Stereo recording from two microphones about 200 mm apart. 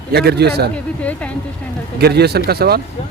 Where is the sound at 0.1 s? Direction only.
55° right (ahead or behind).